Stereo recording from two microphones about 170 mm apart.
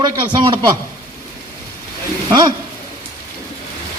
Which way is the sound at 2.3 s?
25° right (ahead or behind).